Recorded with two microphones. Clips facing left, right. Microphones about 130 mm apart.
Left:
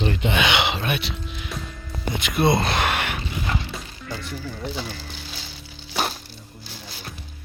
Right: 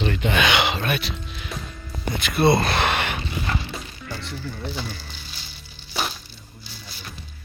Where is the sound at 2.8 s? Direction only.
10° left (ahead or behind).